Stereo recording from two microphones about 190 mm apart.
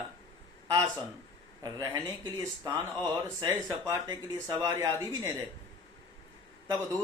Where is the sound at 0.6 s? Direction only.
20° right (ahead or behind).